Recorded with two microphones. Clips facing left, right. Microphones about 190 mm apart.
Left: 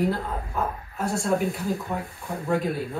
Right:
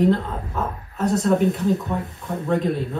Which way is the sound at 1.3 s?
Centre (ahead or behind).